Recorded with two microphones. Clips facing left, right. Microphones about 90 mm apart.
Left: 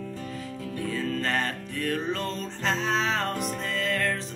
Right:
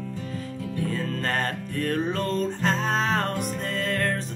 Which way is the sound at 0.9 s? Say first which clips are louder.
Left 2 dB; 40° right (ahead or behind).